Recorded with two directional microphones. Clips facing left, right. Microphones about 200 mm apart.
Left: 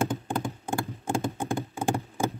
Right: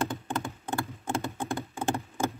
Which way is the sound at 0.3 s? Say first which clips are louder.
Left 3 dB; 15° left (ahead or behind).